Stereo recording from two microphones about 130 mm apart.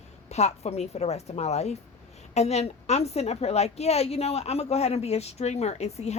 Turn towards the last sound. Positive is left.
turn(degrees=55)  # may be behind; listen again after turning